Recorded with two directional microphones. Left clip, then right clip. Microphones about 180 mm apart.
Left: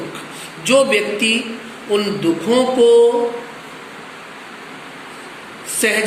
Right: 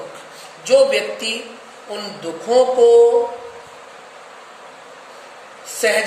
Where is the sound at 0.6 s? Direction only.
25° right (ahead or behind).